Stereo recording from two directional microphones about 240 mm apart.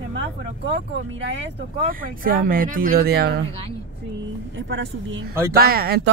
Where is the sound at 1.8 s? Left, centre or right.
Right.